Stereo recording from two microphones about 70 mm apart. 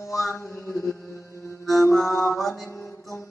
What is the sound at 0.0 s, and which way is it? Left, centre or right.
Mantra, left.